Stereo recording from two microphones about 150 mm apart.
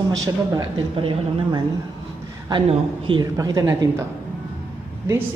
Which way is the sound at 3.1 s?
25° right (ahead or behind).